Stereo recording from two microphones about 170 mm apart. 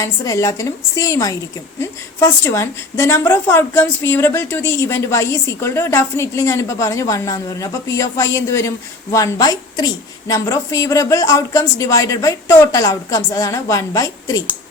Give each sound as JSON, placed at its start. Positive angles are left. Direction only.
{"t": 0.0, "sound": "a woman's voice", "side_deg": 20}